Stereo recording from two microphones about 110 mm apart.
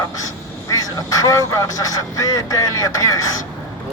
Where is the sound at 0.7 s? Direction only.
30° left (ahead or behind).